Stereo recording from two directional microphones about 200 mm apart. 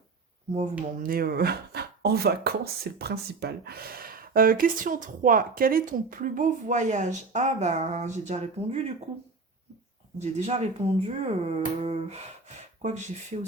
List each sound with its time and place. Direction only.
0.9 s speech: 45° right (ahead or behind)
10.2 s speech: 35° right (ahead or behind)